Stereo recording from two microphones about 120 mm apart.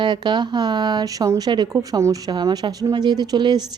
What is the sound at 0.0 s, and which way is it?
Speech, 40° right (ahead or behind).